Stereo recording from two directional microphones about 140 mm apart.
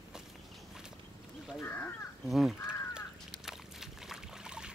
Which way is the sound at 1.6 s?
15° left (ahead or behind).